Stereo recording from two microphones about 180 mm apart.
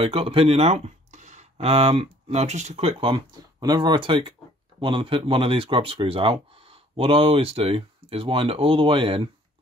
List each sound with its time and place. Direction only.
0.0 s speech: 30° right (ahead or behind)